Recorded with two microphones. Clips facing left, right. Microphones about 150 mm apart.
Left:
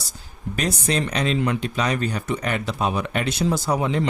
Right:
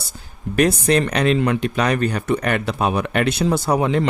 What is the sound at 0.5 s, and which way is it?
Speech, 60° right (ahead or behind).